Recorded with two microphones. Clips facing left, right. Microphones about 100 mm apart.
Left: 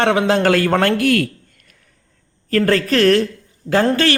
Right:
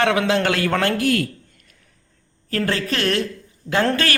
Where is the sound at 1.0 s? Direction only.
70° left (ahead or behind).